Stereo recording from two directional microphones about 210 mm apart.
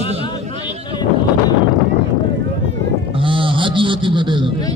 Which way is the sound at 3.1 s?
25° right (ahead or behind).